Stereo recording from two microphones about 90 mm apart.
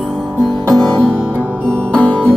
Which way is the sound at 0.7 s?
10° left (ahead or behind).